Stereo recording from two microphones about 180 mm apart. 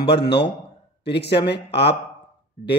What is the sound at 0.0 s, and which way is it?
A man's voice, 70° left (ahead or behind).